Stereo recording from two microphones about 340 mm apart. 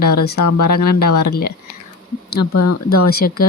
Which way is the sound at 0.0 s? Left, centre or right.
Left.